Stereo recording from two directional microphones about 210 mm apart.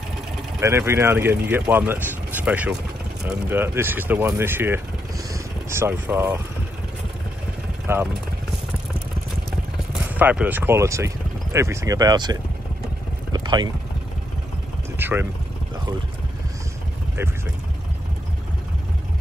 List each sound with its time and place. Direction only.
0.6 s speech: 10° right (ahead or behind)
7.8 s vehicle: 10° right (ahead or behind)
10.0 s speech: 10° right (ahead or behind)
13.3 s vehicle: 20° right (ahead or behind)
15.0 s speech: 10° right (ahead or behind)